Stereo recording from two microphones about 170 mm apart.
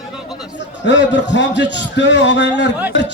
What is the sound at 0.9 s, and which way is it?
A man's voice, 90° left.